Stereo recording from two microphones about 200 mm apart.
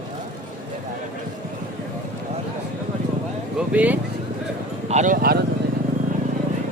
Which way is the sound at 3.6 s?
5° right (ahead or behind).